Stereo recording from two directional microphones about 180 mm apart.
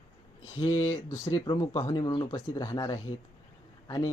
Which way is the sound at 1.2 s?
20° left (ahead or behind).